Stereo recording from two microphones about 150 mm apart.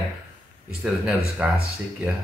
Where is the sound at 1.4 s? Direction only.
10° right (ahead or behind).